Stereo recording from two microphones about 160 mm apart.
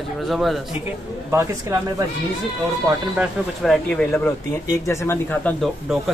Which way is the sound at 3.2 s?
Centre (ahead or behind).